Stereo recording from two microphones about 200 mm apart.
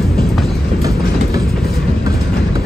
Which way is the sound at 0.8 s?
15° right (ahead or behind).